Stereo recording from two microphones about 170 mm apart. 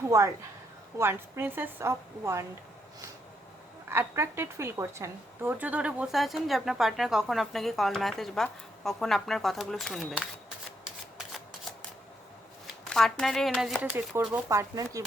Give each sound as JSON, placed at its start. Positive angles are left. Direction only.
{"t": 0.1, "sound": "a woman's voice", "side_deg": -20}
{"t": 3.8, "sound": "a woman's voice", "side_deg": -15}
{"t": 12.9, "sound": "a woman's voice", "side_deg": 5}
{"t": 14.3, "sound": "speech", "side_deg": -15}